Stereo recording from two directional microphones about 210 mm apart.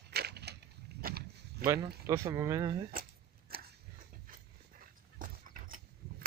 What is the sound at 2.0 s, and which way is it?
Speech, 15° right (ahead or behind).